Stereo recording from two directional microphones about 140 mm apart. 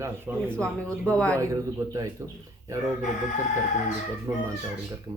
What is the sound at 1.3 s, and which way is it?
Speech, 20° right (ahead or behind).